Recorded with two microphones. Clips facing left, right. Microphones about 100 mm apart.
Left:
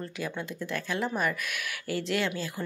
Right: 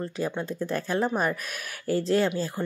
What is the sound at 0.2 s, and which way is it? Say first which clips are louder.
Speech: right 5 dB; 35° right (ahead or behind).